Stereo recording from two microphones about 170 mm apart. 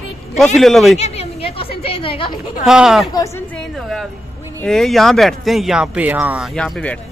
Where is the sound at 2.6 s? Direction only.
5° right (ahead or behind).